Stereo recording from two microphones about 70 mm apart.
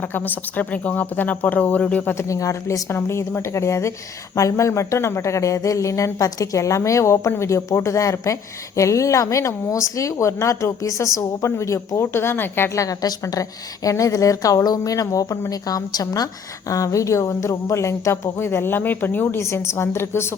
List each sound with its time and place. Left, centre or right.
0.0 s speech: left
2.1 s speech: left
12.7 s speech: left
19.4 s a woman's voice: left